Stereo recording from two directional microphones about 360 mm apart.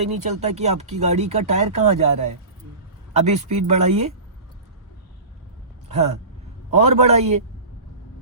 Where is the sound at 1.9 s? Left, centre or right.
Right.